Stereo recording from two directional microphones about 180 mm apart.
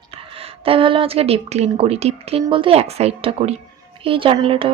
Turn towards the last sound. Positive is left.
turn(degrees=-30)  # may be behind; listen again after turning